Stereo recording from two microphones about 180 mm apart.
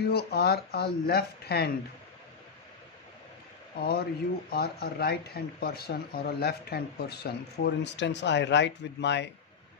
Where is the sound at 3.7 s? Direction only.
60° left (ahead or behind).